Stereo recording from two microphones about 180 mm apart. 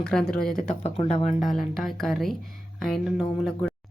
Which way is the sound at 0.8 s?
35° left (ahead or behind).